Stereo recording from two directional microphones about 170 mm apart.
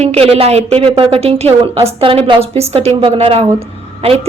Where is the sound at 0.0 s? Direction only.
35° right (ahead or behind).